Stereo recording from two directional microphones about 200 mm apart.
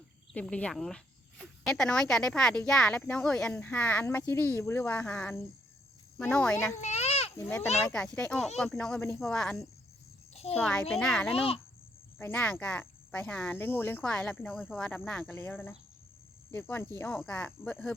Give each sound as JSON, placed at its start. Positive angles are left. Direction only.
{"t": 0.3, "sound": "speech", "side_deg": 5}
{"t": 6.7, "sound": "a sound", "side_deg": 35}
{"t": 7.3, "sound": "speech", "side_deg": 10}
{"t": 11.3, "sound": "a child's voice", "side_deg": 30}
{"t": 12.2, "sound": "speech", "side_deg": 10}